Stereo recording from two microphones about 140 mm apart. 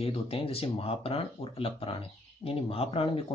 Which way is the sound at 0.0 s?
45° left (ahead or behind).